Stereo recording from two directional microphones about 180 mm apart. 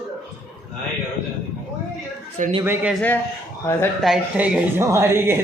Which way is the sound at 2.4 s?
45° right (ahead or behind).